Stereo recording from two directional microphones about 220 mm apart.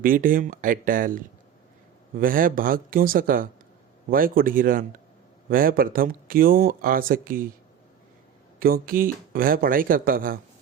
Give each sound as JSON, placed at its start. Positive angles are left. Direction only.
{"t": 0.0, "sound": "speech", "side_deg": -40}
{"t": 8.5, "sound": "speech", "side_deg": -40}